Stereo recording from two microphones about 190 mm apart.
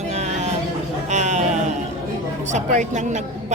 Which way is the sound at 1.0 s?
40° right (ahead or behind).